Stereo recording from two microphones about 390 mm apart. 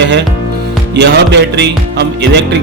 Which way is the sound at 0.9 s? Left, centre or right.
Right.